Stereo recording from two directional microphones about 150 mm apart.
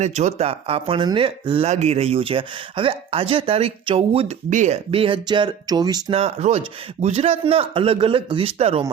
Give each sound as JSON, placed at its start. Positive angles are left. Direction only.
{"t": 0.0, "sound": "speech", "side_deg": -50}
{"t": 4.4, "sound": "speech", "side_deg": -55}
{"t": 6.1, "sound": "speech", "side_deg": -45}